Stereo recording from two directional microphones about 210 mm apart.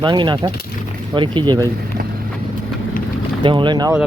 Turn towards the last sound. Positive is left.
turn(degrees=-20)  # may be behind; listen again after turning